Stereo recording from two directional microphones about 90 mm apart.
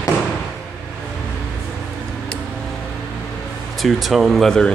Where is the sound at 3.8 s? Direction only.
Centre (ahead or behind).